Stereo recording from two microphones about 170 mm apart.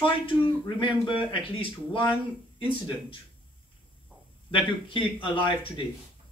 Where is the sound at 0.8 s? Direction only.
30° left (ahead or behind).